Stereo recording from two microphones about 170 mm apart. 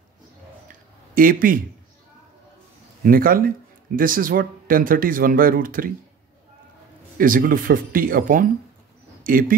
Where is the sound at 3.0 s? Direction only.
60° right (ahead or behind).